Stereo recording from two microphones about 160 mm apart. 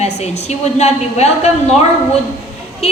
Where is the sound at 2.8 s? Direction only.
40° left (ahead or behind).